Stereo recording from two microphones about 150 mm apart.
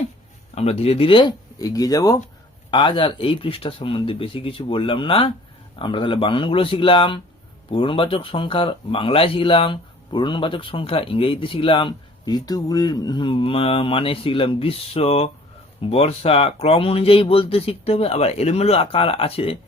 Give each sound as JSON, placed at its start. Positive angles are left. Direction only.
{"t": 0.5, "sound": "speech", "side_deg": 45}